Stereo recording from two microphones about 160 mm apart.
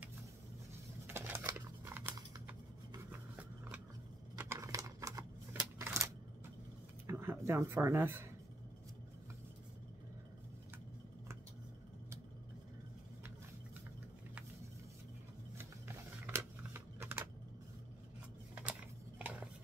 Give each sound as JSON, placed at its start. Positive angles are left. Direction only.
{"t": 1.0, "sound": "a sound", "side_deg": -15}
{"t": 2.4, "sound": "rub", "side_deg": -10}
{"t": 4.4, "sound": "typewriter", "side_deg": -20}
{"t": 7.1, "sound": "speech", "side_deg": -15}
{"t": 15.5, "sound": "typing", "side_deg": -15}
{"t": 18.5, "sound": "a sound", "side_deg": -10}